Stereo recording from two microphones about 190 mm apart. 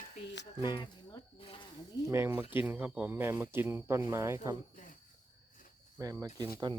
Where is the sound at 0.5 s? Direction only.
15° right (ahead or behind).